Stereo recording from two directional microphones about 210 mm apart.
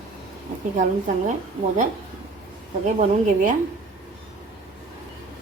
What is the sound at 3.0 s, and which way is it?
Speech, 40° right (ahead or behind).